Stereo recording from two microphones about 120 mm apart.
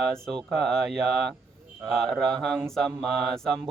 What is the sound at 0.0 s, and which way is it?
Speech, 5° left (ahead or behind).